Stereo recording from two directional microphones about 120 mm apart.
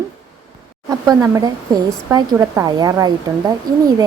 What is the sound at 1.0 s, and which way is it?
A woman's voice, 25° right (ahead or behind).